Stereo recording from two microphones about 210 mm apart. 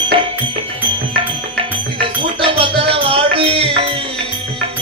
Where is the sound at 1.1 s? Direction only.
25° right (ahead or behind).